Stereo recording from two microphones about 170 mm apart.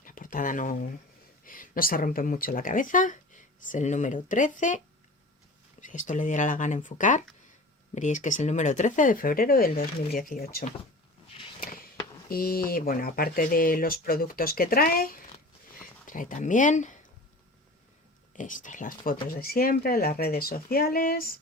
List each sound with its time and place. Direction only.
0.0 s a sound: 50° left (ahead or behind)
1.5 s speech: 55° left (ahead or behind)
5.8 s speech: 50° left (ahead or behind)
12.3 s speech: 60° left (ahead or behind)
15.7 s a sound: 50° left (ahead or behind)
18.3 s speech: 50° left (ahead or behind)